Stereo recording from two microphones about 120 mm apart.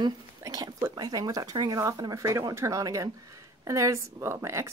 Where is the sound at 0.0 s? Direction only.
30° right (ahead or behind).